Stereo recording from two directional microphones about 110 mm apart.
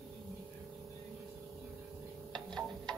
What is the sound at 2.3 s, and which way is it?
Music, 5° left (ahead or behind).